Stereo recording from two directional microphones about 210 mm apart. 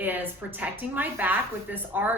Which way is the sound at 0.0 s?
10° right (ahead or behind).